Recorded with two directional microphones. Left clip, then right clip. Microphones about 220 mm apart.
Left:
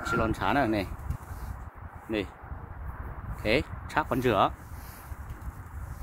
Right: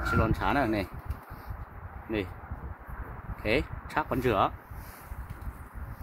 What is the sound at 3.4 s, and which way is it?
Speech, 20° left (ahead or behind).